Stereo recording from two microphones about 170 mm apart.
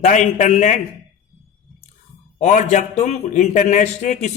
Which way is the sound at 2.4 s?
45° left (ahead or behind).